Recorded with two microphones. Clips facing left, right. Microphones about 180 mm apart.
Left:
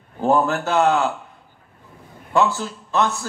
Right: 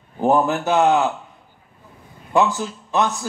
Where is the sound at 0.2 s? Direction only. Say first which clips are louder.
Right 1 dB; 15° right (ahead or behind).